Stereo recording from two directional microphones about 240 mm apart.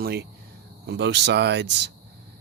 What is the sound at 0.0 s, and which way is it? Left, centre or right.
Speech, right.